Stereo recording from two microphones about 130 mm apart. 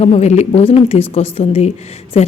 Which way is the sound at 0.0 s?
55° left (ahead or behind).